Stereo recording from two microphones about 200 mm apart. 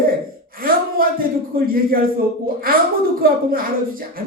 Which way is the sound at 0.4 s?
45° right (ahead or behind).